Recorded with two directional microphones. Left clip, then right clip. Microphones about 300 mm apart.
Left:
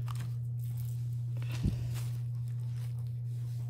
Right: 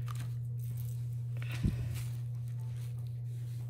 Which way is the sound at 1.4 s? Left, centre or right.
Centre.